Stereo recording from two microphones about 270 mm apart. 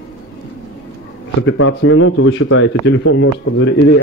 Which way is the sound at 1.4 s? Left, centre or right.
Left.